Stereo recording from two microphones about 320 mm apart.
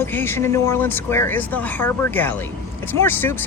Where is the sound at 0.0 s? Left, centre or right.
Centre.